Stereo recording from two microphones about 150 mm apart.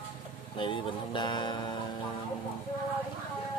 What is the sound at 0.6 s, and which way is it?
Speech, 35° left (ahead or behind).